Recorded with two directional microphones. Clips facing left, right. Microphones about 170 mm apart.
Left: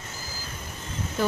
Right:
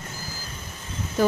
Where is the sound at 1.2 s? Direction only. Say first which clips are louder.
Right 5 dB; 45° right (ahead or behind).